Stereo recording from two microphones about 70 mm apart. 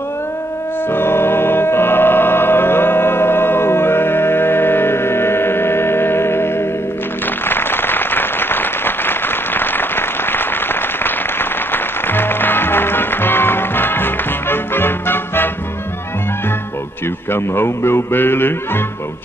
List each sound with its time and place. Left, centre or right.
0.9 s music: left
7.4 s a sound: left
17.3 s speech: left